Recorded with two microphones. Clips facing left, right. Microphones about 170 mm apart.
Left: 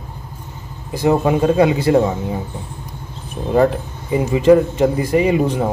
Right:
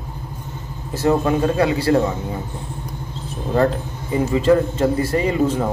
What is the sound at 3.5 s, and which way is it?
Speech, 15° left (ahead or behind).